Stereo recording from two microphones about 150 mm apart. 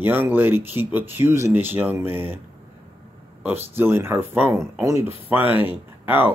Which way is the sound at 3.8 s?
15° right (ahead or behind).